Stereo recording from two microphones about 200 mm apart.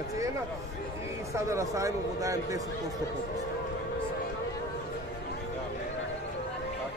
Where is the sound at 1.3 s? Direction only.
15° right (ahead or behind).